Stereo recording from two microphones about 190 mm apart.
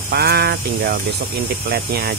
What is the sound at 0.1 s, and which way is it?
Speech, 60° right (ahead or behind).